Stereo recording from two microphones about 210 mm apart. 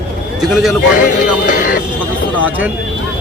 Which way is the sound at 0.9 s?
40° left (ahead or behind).